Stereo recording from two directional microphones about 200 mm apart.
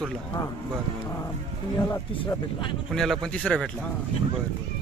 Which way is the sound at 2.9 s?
Centre (ahead or behind).